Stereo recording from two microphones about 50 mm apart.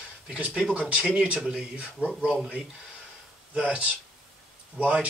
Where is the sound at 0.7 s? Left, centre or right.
Right.